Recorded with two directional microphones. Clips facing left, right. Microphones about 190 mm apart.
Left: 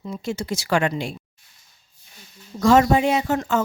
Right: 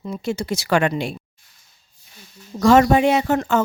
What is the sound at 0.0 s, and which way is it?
Speech, 65° right (ahead or behind).